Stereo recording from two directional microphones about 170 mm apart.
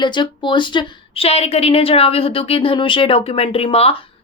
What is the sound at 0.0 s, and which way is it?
A woman's voice, 30° left (ahead or behind).